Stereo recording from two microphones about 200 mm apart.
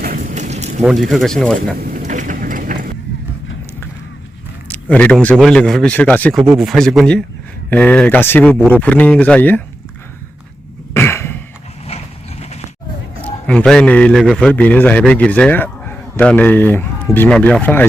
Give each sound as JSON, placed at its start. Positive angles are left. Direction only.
{"t": 0.0, "sound": "mechanisms", "side_deg": -45}
{"t": 0.8, "sound": "speech", "side_deg": -5}
{"t": 1.8, "sound": "vehicle", "side_deg": -40}
{"t": 4.7, "sound": "a man's voice", "side_deg": 5}
{"t": 10.9, "sound": "a sound", "side_deg": 10}
{"t": 13.2, "sound": "a man's voice", "side_deg": 5}